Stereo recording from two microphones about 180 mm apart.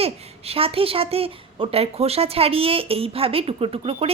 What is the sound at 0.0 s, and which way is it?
A woman's voice, 35° right (ahead or behind).